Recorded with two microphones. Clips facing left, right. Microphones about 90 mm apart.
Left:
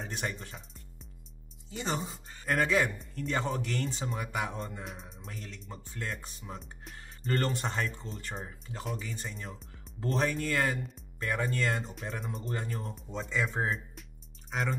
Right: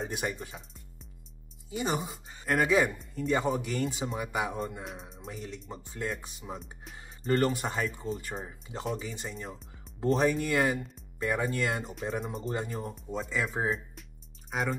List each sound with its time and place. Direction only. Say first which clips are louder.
0.0 s speech: right 3 dB; 10° right (ahead or behind)
1.7 s speech: right 3 dB; 10° right (ahead or behind)
5.0 s speech: right 4 dB; 15° right (ahead or behind)
6.6 s speech: right 1 dB; centre (ahead or behind)
12.5 s speech: right 2 dB; 15° right (ahead or behind)
12.9 s speech: even; 5° right (ahead or behind)
14.5 s music: right 2 dB; 5° right (ahead or behind)